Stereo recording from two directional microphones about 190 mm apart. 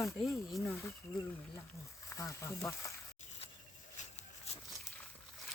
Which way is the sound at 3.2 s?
30° left (ahead or behind).